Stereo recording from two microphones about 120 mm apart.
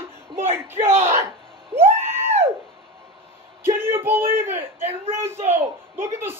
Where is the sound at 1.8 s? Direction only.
60° right (ahead or behind).